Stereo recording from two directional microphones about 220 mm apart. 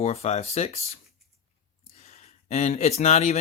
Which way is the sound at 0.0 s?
30° left (ahead or behind).